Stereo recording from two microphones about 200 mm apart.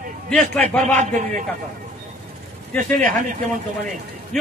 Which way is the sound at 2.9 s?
40° right (ahead or behind).